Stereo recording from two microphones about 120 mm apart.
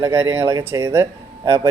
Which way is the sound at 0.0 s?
20° right (ahead or behind).